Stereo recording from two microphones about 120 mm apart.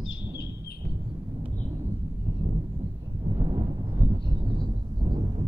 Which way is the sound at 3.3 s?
45° right (ahead or behind).